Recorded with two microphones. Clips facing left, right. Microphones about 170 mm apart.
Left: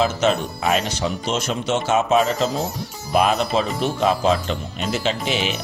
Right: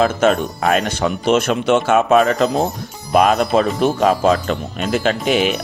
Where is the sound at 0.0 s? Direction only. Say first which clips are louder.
Right 4 dB; 50° right (ahead or behind).